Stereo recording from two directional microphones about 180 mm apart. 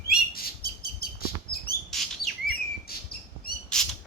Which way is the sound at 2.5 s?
60° left (ahead or behind).